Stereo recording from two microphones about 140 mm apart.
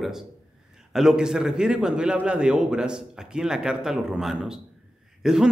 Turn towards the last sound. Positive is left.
turn(degrees=-5)  # may be behind; listen again after turning